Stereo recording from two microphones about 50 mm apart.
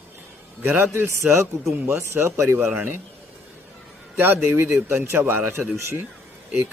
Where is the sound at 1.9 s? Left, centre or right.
Right.